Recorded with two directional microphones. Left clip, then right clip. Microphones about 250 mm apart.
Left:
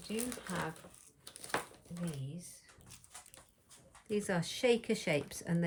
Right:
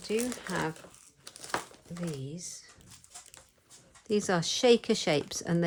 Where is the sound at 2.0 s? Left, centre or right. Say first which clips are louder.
Right 7 dB; right.